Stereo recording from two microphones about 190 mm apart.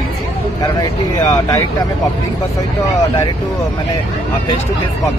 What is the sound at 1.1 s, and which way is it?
Speech, 20° left (ahead or behind).